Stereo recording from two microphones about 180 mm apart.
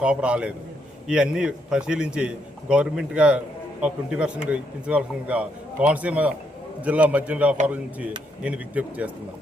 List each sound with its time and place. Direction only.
0.0 s a man's voice: 5° right (ahead or behind)